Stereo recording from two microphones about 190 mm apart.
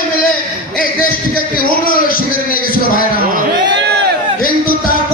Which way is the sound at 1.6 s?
50° left (ahead or behind).